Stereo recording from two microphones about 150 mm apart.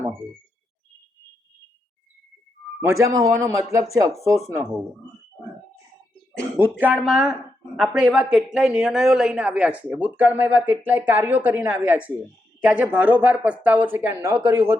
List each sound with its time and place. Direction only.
2.8 s speech: 20° right (ahead or behind)
6.6 s speech: 10° right (ahead or behind)